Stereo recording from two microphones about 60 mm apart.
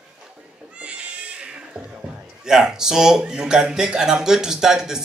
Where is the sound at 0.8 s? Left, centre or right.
Centre.